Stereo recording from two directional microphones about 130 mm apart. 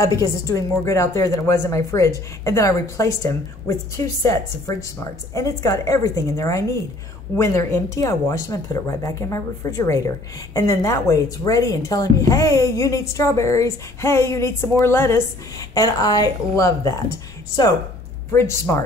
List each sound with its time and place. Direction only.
0.0 s speech: 25° left (ahead or behind)
15.7 s speech: 30° left (ahead or behind)
18.3 s speech: 20° left (ahead or behind)